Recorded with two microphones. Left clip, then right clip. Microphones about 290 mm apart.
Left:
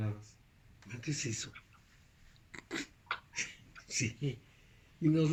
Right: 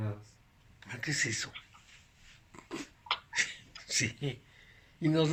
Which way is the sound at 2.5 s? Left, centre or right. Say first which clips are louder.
Left 2 dB; left.